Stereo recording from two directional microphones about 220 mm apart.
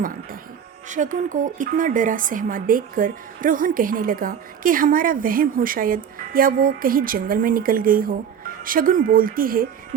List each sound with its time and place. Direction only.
0.9 s speech: 35° right (ahead or behind)